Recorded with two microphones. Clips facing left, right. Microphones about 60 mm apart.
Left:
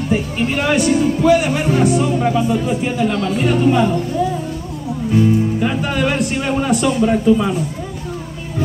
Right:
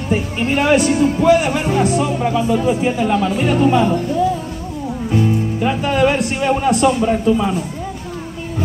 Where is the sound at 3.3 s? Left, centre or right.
Centre.